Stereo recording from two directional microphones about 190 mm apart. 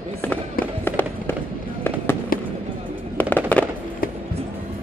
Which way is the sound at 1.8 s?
10° left (ahead or behind).